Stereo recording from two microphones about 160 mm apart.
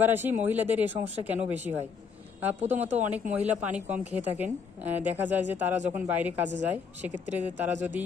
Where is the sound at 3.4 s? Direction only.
10° right (ahead or behind).